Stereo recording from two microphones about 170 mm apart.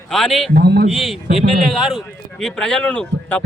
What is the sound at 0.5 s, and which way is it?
Speech, 65° right (ahead or behind).